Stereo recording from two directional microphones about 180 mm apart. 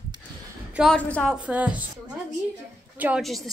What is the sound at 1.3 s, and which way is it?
Speech, 5° right (ahead or behind).